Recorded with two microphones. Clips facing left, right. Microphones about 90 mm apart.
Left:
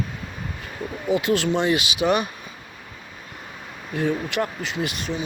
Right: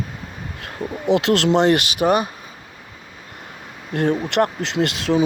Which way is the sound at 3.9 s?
65° right (ahead or behind).